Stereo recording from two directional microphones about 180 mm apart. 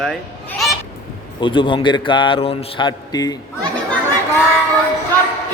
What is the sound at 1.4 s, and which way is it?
A man's voice, 25° left (ahead or behind).